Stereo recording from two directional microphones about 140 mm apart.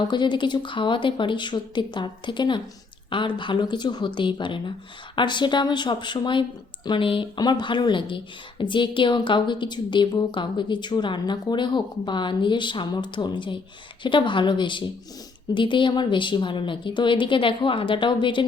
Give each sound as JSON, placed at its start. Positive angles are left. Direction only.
{"t": 0.1, "sound": "speech", "side_deg": 35}